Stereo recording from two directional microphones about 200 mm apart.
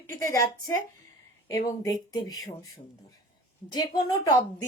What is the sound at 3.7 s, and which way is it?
Speech, 20° left (ahead or behind).